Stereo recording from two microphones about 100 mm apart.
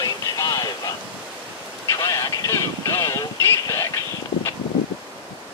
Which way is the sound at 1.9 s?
35° left (ahead or behind).